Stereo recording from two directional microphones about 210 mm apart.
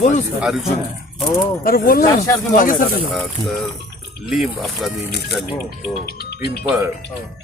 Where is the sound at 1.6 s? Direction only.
45° left (ahead or behind).